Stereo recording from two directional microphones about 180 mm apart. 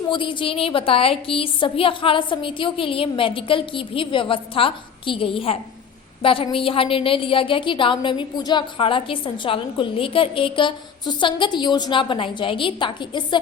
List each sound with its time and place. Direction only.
0.1 s a woman's voice: 25° left (ahead or behind)